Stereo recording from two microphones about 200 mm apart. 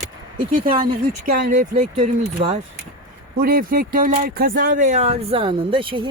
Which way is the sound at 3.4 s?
45° right (ahead or behind).